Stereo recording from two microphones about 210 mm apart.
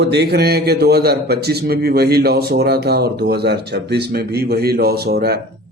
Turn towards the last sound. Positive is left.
turn(degrees=-50)  # may be behind; listen again after turning